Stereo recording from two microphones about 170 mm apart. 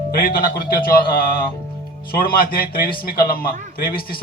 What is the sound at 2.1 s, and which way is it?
A man's voice, 60° left (ahead or behind).